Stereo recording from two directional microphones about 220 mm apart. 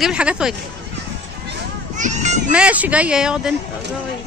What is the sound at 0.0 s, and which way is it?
Speech, 5° right (ahead or behind).